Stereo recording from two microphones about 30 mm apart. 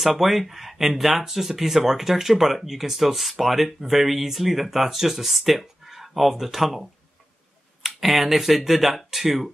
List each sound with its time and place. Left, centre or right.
0.0 s speech: centre